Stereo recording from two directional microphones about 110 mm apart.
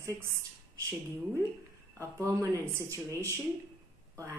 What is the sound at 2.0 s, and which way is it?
Speech, 30° right (ahead or behind).